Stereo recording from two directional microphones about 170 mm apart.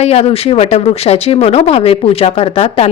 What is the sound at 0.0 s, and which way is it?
Speech, 35° left (ahead or behind).